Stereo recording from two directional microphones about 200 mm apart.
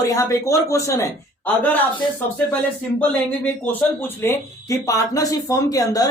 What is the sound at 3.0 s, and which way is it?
Speech, 10° left (ahead or behind).